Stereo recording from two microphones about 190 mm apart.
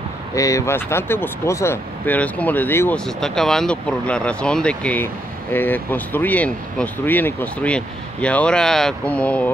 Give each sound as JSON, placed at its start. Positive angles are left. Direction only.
{"t": 0.3, "sound": "speech", "side_deg": 15}